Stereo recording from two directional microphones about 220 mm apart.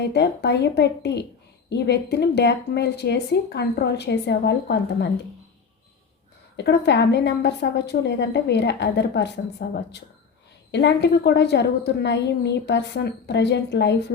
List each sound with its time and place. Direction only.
0.1 s a woman's voice: 50° left (ahead or behind)
6.6 s a woman's voice: 50° left (ahead or behind)